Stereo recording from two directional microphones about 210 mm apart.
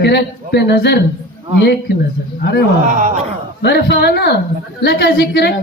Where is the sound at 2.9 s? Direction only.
40° right (ahead or behind).